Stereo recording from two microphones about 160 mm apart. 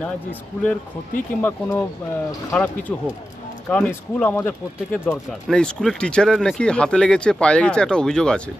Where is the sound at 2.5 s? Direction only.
5° left (ahead or behind).